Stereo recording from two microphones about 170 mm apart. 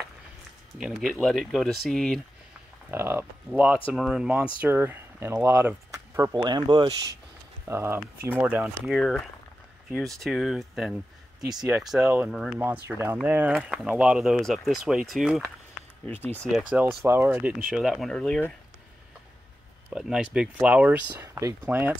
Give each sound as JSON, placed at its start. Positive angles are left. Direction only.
{"t": 0.7, "sound": "speech", "side_deg": 0}
{"t": 2.9, "sound": "speech", "side_deg": -15}
{"t": 6.3, "sound": "speech", "side_deg": -25}
{"t": 7.6, "sound": "speech", "side_deg": -15}
{"t": 12.5, "sound": "speech", "side_deg": -15}
{"t": 16.5, "sound": "speech", "side_deg": -5}
{"t": 19.9, "sound": "speech", "side_deg": -5}